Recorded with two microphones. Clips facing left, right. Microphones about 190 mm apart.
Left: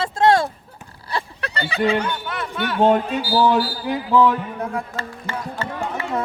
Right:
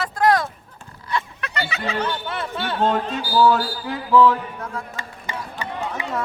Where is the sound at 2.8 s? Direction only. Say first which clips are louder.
Left 5 dB; 10° left (ahead or behind).